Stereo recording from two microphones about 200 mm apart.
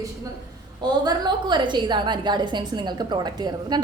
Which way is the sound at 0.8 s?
20° right (ahead or behind).